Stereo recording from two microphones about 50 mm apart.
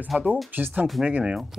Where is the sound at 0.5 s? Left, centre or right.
Right.